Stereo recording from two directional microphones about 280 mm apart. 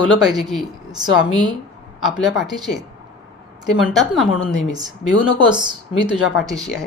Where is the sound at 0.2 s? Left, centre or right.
Centre.